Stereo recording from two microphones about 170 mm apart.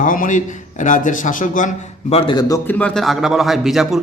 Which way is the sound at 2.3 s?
25° left (ahead or behind).